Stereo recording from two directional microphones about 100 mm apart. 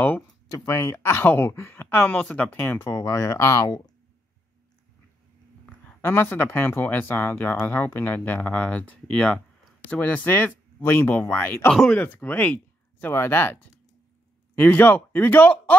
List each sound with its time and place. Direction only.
0.7 s speech: 25° left (ahead or behind)
2.9 s speech: 35° left (ahead or behind)
5.9 s speech: 20° left (ahead or behind)